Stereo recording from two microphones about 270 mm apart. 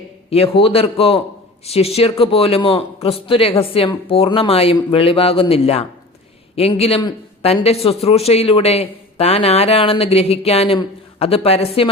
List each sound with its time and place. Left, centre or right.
0.3 s a man's voice: left